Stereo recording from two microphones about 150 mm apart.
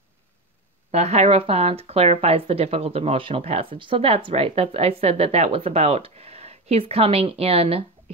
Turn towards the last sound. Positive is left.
turn(degrees=-40)  # may be behind; listen again after turning